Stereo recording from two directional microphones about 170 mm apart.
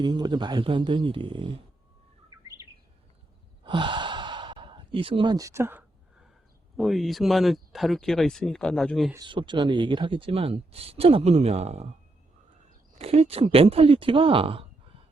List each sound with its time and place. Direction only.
0.0 s speech: 25° right (ahead or behind)
3.6 s sigh: 30° right (ahead or behind)
6.7 s speech: centre (ahead or behind)
9.1 s speech: 30° right (ahead or behind)
13.0 s speech: 35° right (ahead or behind)